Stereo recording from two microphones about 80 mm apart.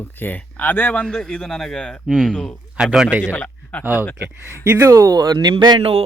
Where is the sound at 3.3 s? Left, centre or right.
Centre.